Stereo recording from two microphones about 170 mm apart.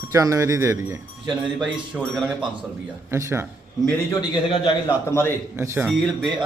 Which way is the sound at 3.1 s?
15° right (ahead or behind).